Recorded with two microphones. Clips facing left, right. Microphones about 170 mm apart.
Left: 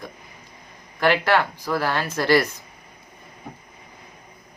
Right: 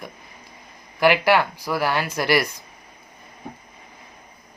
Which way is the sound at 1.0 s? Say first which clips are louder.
Right 2 dB; 10° right (ahead or behind).